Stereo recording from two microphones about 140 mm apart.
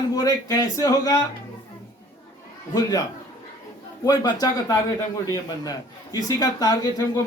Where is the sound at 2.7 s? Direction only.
25° left (ahead or behind).